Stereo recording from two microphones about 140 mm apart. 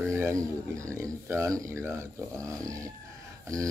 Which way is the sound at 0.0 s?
15° right (ahead or behind).